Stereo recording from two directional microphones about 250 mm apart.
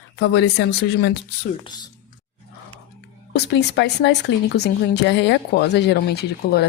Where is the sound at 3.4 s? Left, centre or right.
Left.